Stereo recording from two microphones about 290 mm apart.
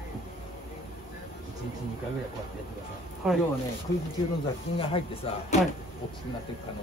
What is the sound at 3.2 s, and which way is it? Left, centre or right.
Speech, centre.